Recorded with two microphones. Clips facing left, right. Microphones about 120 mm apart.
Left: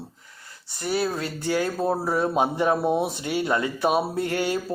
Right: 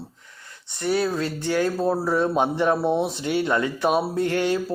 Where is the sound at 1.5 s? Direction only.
15° left (ahead or behind).